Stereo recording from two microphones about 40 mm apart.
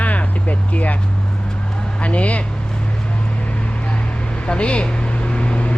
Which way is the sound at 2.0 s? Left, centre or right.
Left.